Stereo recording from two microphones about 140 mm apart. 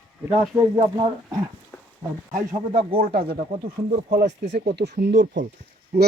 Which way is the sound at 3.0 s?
90° right.